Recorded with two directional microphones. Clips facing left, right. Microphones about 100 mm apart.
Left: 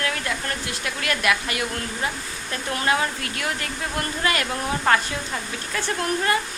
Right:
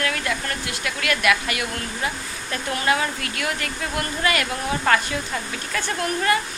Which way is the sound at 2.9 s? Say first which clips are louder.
Right 1 dB; 30° left (ahead or behind).